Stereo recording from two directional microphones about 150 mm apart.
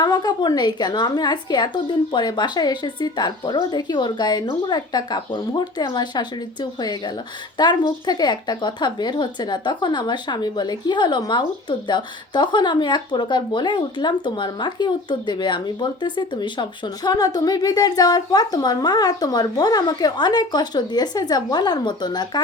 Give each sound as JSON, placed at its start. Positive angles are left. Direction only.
{"t": 0.0, "sound": "a woman's voice", "side_deg": 25}